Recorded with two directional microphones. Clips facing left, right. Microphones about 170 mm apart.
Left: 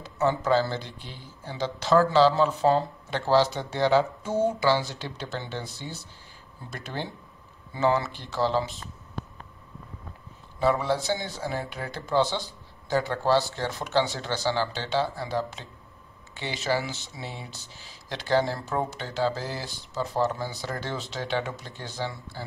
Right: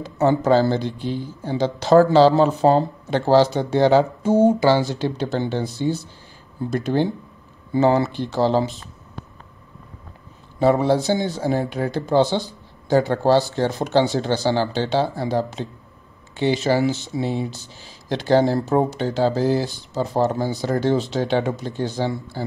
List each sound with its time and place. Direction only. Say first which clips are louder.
0.2 s speech: right 7 dB; 40° right (ahead or behind)
6.7 s speech: right 14 dB; 35° right (ahead or behind)
8.2 s speech: right 7 dB; 30° right (ahead or behind)
10.6 s speech: right 7 dB; 40° right (ahead or behind)
11.0 s speech: right 8 dB; 25° right (ahead or behind)
19.9 s speech: right 5 dB; 40° right (ahead or behind)